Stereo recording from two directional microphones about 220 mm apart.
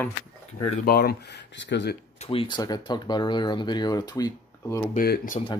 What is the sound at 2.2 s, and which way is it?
Speech, 25° left (ahead or behind).